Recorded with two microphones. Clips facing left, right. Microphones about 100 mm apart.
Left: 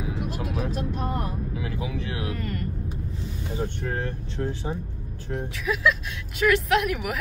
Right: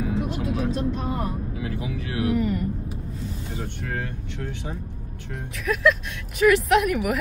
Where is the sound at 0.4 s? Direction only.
Centre (ahead or behind).